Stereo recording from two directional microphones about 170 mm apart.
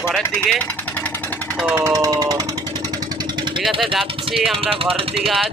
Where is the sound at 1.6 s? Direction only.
10° right (ahead or behind).